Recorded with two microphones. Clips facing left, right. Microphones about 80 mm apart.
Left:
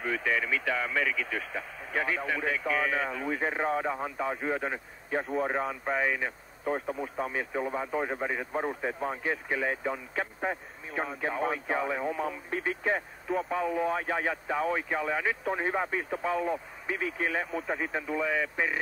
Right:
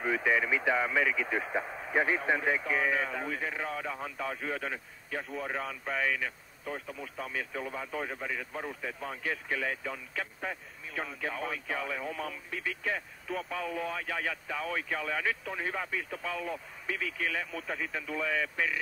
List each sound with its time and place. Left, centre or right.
0.0 s speech: centre
3.3 s a man's voice: left
12.4 s a man's voice: left
18.1 s a man's voice: centre